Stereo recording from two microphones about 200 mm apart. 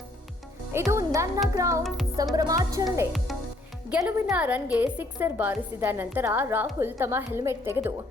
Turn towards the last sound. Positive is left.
turn(degrees=-15)  # may be behind; listen again after turning